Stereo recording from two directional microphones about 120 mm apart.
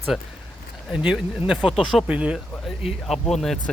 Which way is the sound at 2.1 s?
10° right (ahead or behind).